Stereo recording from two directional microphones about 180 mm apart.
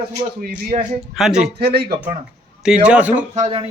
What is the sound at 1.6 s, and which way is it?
Speech, 60° right (ahead or behind).